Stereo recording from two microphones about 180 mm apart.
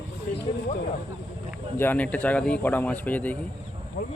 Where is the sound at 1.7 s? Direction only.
10° left (ahead or behind).